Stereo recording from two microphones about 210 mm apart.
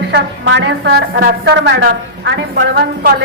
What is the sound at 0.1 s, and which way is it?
A woman's voice, 55° right (ahead or behind).